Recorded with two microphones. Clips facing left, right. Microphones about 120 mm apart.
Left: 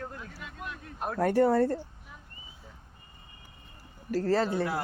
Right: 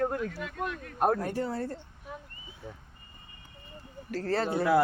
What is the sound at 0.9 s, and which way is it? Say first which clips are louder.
Speech: right 9 dB; 50° right (ahead or behind).